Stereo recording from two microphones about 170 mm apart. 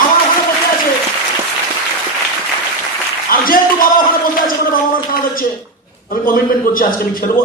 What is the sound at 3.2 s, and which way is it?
A man's voice, 55° left (ahead or behind).